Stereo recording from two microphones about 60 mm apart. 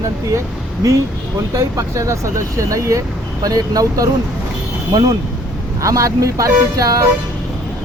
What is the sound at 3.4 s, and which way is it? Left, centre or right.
Speech, right.